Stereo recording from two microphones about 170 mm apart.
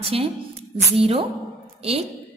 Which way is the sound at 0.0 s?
35° right (ahead or behind).